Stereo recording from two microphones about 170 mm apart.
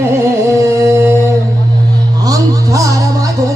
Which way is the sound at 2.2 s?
20° right (ahead or behind).